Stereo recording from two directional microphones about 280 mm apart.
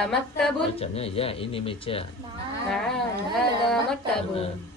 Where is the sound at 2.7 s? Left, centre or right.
Centre.